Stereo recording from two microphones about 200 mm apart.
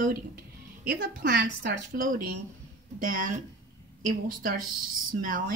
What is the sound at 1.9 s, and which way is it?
Speech, 45° right (ahead or behind).